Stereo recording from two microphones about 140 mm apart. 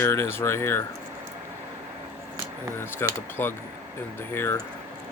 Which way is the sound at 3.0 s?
15° left (ahead or behind).